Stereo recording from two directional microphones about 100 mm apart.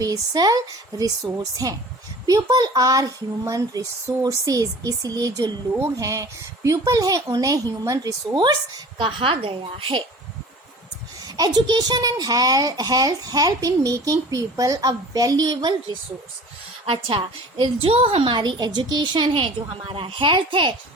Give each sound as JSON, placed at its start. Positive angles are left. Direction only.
{"t": 0.0, "sound": "a child's voice", "side_deg": -40}
{"t": 9.0, "sound": "a woman's voice", "side_deg": -60}
{"t": 11.3, "sound": "a child's voice", "side_deg": -40}
{"t": 16.8, "sound": "a woman's voice", "side_deg": -70}